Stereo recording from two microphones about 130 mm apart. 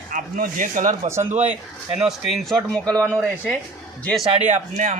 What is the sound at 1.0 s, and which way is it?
Speech, 20° right (ahead or behind).